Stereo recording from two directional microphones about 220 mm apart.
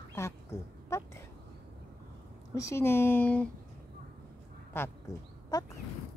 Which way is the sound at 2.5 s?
15° left (ahead or behind).